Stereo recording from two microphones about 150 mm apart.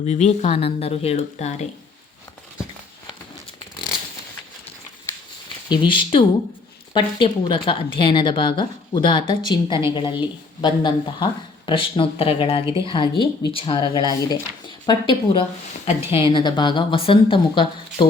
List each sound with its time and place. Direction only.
0.0 s speech: 50° left (ahead or behind)
5.6 s speech: 30° left (ahead or behind)